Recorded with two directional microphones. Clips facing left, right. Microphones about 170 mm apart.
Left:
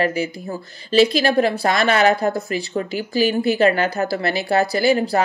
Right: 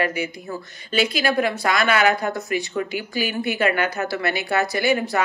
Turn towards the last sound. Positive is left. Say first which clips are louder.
# left 4 dB
turn(degrees=30)  # may be behind; listen again after turning